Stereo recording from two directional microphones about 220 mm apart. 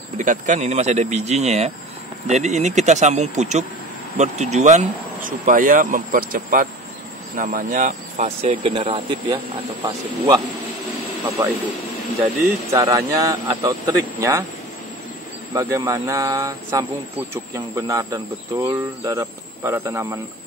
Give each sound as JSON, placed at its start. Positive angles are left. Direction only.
{"t": 0.2, "sound": "speech", "side_deg": -35}
{"t": 12.4, "sound": "speech", "side_deg": -15}
{"t": 15.5, "sound": "speech", "side_deg": -15}